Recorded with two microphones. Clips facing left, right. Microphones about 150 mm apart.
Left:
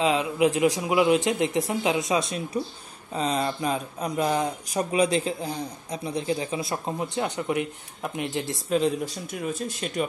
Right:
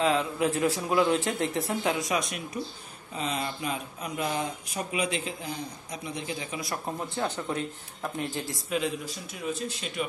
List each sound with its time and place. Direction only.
0.0 s a man's voice: 15° left (ahead or behind)
8.6 s speech: 35° left (ahead or behind)
9.3 s speech: 45° left (ahead or behind)